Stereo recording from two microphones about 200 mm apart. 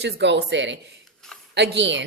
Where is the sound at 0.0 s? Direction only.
60° right (ahead or behind).